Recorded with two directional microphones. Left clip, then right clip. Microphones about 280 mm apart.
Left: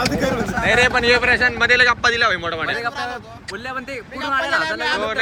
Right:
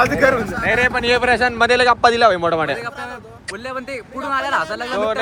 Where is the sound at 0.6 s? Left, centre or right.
Centre; by 4.8 s right.